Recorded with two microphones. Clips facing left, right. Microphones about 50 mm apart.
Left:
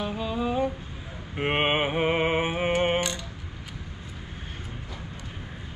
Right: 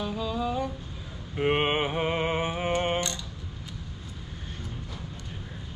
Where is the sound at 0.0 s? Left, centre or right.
Left.